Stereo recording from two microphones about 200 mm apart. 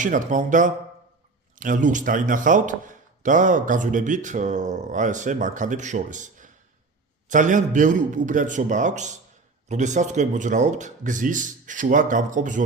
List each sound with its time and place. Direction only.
0.0 s speech: 40° right (ahead or behind)